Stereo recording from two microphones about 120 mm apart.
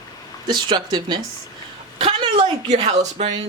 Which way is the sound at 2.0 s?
55° right (ahead or behind).